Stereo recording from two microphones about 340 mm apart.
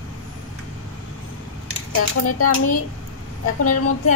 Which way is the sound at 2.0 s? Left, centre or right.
Left.